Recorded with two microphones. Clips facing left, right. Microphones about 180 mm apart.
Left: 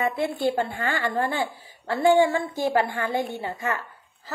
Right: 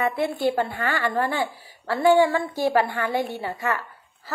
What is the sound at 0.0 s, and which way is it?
A woman's voice, 25° left (ahead or behind).